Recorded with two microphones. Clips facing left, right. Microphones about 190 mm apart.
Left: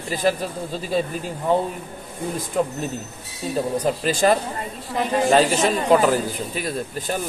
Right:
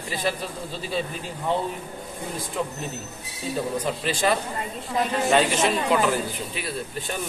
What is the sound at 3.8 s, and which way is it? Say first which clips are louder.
A man's voice: left 7 dB; 40° left (ahead or behind).